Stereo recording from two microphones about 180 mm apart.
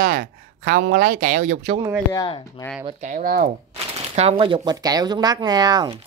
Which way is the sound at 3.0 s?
50° right (ahead or behind).